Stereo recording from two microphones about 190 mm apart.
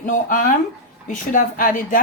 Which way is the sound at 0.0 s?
45° left (ahead or behind).